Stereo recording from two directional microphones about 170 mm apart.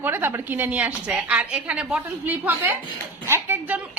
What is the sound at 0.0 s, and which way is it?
A woman's voice, 15° right (ahead or behind).